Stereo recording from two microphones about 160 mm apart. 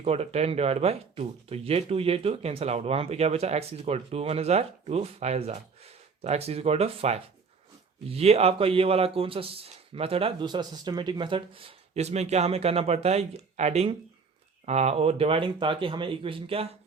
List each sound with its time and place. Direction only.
0.0 s speech: 40° right (ahead or behind)